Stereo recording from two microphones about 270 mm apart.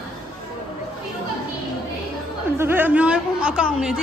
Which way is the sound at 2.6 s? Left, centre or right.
Centre.